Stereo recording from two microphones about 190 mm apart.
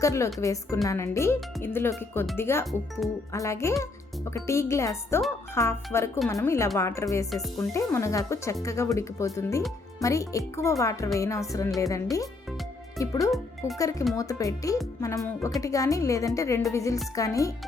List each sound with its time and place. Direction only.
0.0 s speech: 15° left (ahead or behind)